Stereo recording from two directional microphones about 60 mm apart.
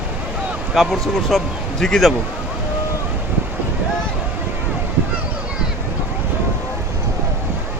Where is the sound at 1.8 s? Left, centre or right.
Centre.